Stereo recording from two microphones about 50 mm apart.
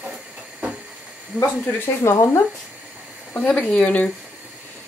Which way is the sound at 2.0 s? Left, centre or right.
Left.